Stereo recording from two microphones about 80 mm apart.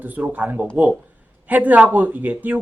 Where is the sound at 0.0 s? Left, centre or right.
Right.